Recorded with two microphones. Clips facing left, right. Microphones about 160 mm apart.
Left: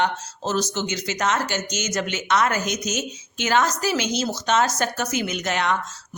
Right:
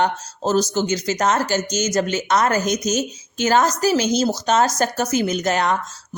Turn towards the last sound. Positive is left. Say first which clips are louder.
# right 4 dB
turn(degrees=-40)  # may be behind; listen again after turning